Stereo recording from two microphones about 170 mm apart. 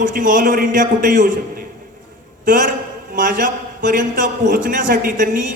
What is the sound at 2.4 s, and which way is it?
A man's voice, 55° right (ahead or behind).